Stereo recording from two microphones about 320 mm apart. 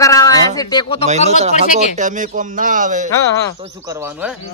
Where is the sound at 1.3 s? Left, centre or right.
Centre.